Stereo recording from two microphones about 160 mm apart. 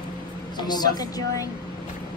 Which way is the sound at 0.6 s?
25° left (ahead or behind).